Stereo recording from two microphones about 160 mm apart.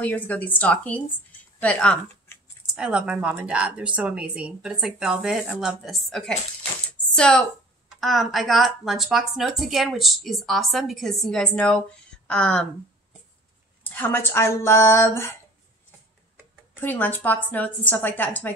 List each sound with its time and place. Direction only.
0.0 s speech: 10° left (ahead or behind)
2.6 s speech: 5° right (ahead or behind)
13.8 s speech: 10° left (ahead or behind)
16.8 s speech: 10° left (ahead or behind)